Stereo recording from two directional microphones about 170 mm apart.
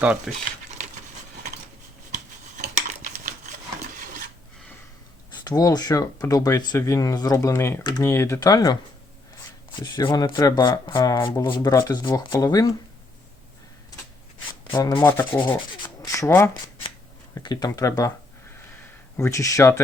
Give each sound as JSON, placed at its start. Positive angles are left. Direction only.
{"t": 0.0, "sound": "speech", "side_deg": -5}
{"t": 2.1, "sound": "a sound", "side_deg": -50}
{"t": 5.5, "sound": "speech", "side_deg": 20}
{"t": 14.7, "sound": "rub", "side_deg": 25}
{"t": 17.4, "sound": "speech", "side_deg": 25}
{"t": 19.1, "sound": "rub", "side_deg": 15}